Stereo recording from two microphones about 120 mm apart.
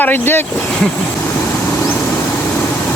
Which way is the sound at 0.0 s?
15° left (ahead or behind).